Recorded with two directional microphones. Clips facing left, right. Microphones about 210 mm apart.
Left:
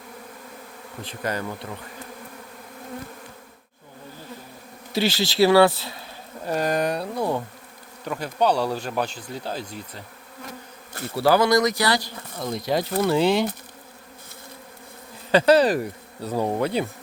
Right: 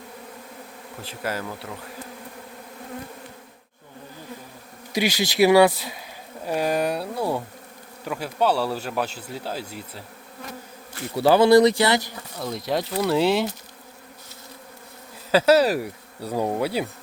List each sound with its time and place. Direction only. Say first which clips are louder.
1.2 s speech: left 1 dB; 5° right (ahead or behind)
4.9 s speech: even; 15° right (ahead or behind)
11.2 s speech: right 4 dB; 25° right (ahead or behind)
12.4 s speech: left 1 dB; centre (ahead or behind)
15.3 s speech: left 1 dB; 5° right (ahead or behind)